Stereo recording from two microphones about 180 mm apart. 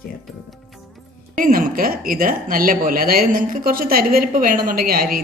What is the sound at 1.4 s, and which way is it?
Speech, 50° right (ahead or behind).